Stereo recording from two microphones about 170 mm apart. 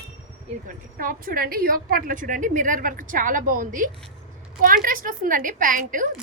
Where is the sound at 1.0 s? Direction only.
55° right (ahead or behind).